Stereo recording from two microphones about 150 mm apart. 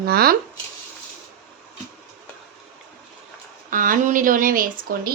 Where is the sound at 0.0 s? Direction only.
90° right.